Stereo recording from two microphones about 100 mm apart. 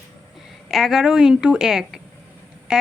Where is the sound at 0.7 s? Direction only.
Centre (ahead or behind).